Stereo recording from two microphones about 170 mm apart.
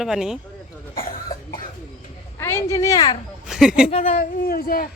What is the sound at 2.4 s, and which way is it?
Speech, 15° left (ahead or behind).